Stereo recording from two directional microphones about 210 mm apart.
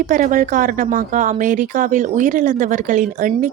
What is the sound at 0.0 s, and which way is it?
Speech, 40° right (ahead or behind).